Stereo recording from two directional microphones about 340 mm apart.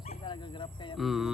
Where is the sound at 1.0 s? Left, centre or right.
Centre.